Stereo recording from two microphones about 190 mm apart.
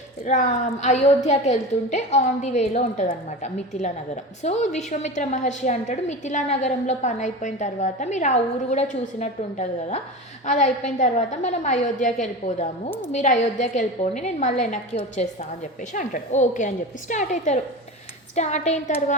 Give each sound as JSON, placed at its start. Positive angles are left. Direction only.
{"t": 0.3, "sound": "a woman's voice", "side_deg": 40}